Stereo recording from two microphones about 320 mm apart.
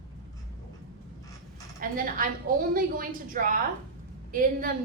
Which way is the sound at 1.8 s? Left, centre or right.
Right.